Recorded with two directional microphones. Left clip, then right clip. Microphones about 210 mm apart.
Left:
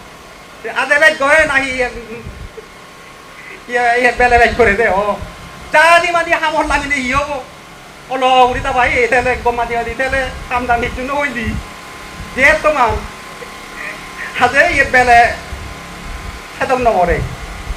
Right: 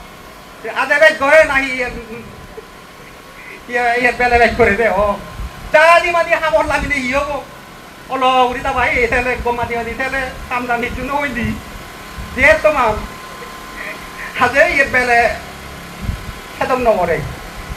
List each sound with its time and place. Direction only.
0.7 s speech: 55° left (ahead or behind)
3.7 s speech: 55° left (ahead or behind)
14.3 s speech: 50° left (ahead or behind)
16.6 s speech: 50° left (ahead or behind)